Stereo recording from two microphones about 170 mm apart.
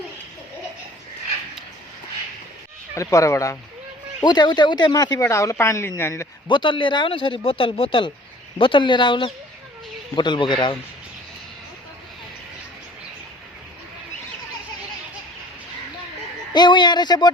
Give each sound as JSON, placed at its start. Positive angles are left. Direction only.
{"t": 2.9, "sound": "speech", "side_deg": 20}
{"t": 6.5, "sound": "speech", "side_deg": 30}
{"t": 16.5, "sound": "speech", "side_deg": 25}